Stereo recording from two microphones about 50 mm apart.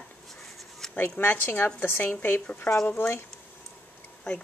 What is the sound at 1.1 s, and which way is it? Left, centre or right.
Speech, left.